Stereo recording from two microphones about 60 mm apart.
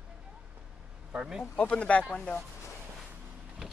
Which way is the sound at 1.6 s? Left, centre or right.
Centre.